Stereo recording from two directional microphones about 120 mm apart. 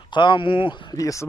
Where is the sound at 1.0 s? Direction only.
25° left (ahead or behind).